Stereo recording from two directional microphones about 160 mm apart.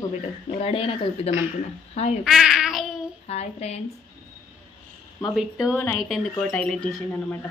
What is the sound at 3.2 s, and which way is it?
Speech, 40° left (ahead or behind).